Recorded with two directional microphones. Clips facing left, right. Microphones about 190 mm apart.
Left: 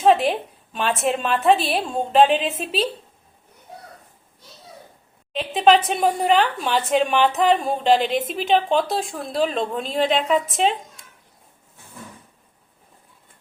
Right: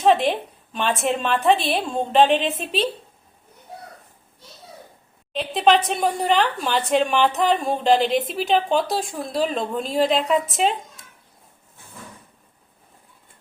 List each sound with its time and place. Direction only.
0.0 s speech: centre (ahead or behind)
5.3 s speech: centre (ahead or behind)